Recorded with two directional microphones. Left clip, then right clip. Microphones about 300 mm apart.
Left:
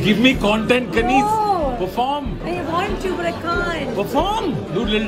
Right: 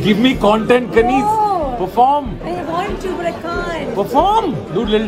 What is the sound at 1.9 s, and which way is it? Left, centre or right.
Speech, centre.